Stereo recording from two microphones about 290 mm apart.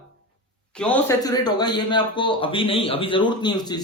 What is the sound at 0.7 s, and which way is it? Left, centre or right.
A man's voice, centre.